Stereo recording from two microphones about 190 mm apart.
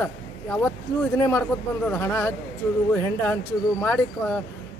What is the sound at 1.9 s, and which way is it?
Speech, 5° left (ahead or behind).